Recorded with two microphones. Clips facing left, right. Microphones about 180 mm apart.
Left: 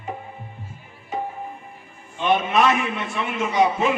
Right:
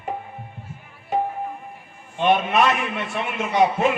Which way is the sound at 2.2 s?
60° right (ahead or behind).